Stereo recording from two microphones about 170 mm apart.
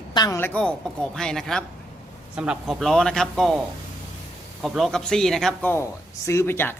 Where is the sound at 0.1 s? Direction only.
25° left (ahead or behind).